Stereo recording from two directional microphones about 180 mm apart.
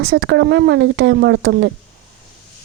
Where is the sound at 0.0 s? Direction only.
75° right (ahead or behind).